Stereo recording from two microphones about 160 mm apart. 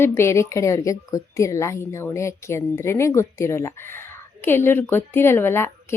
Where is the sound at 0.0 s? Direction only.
15° left (ahead or behind).